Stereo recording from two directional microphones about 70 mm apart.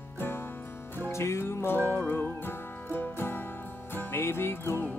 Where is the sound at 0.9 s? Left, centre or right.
Left.